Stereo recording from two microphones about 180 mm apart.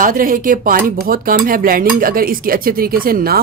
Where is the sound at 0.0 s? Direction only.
50° right (ahead or behind).